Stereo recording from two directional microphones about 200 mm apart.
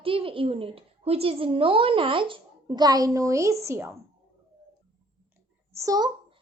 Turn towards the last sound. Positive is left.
turn(degrees=-15)  # may be behind; listen again after turning